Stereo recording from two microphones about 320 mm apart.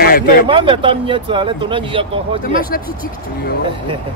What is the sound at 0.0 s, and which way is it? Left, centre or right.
Speech, left.